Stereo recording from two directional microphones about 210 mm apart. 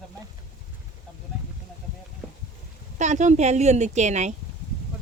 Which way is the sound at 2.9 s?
35° right (ahead or behind).